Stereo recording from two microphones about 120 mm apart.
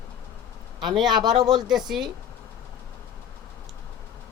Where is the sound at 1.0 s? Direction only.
40° right (ahead or behind).